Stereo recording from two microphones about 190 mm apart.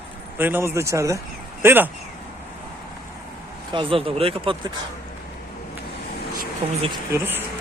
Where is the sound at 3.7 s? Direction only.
25° right (ahead or behind).